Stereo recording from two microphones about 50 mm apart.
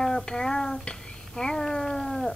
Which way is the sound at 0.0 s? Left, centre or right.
Centre.